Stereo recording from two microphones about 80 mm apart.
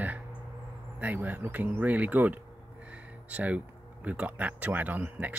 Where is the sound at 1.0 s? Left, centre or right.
Right.